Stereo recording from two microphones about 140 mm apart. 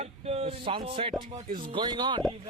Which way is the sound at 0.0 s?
45° right (ahead or behind).